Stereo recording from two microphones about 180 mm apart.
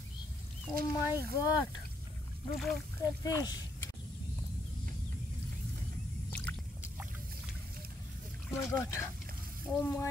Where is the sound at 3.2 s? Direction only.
20° left (ahead or behind).